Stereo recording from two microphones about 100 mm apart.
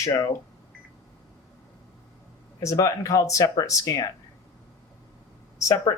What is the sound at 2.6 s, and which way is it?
Speech, 30° left (ahead or behind).